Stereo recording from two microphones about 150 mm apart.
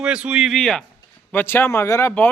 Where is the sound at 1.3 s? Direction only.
15° left (ahead or behind).